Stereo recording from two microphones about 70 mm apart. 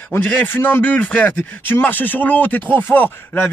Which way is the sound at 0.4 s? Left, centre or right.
Left.